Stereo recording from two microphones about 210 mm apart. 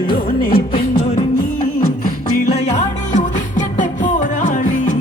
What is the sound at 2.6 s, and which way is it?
Music, 35° left (ahead or behind).